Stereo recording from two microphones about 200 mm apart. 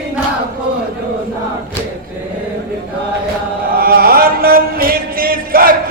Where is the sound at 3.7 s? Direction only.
50° right (ahead or behind).